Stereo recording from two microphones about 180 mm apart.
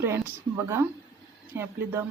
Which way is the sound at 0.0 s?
15° right (ahead or behind).